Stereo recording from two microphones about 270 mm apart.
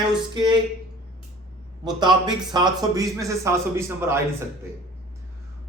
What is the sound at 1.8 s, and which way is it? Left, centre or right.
A man's voice, centre.